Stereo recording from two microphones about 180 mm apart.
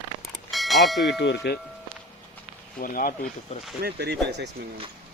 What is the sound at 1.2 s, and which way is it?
Speech, 70° left (ahead or behind).